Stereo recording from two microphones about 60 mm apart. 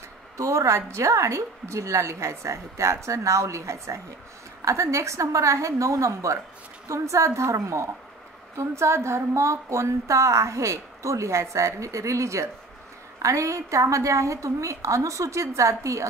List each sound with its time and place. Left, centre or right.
0.4 s a woman's voice: right